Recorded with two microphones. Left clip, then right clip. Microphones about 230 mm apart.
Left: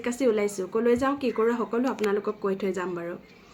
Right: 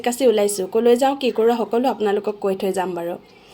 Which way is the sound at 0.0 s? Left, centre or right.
Centre.